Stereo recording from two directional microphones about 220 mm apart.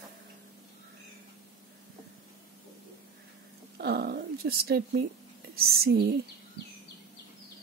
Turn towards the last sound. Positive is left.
turn(degrees=-45)  # may be behind; listen again after turning